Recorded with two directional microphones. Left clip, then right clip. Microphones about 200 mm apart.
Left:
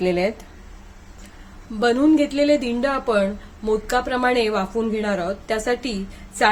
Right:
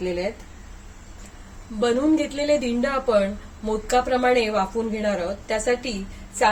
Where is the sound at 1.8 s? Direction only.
30° left (ahead or behind).